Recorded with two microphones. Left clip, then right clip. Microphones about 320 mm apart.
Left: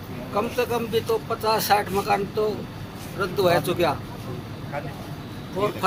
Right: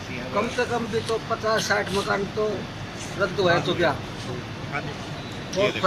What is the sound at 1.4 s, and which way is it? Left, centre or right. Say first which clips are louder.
Speech: left 3 dB; centre.